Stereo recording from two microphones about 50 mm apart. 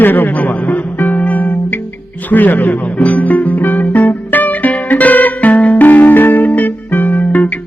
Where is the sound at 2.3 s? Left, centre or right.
Left.